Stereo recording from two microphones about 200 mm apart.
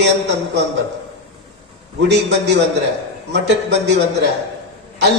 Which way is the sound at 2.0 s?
60° right (ahead or behind).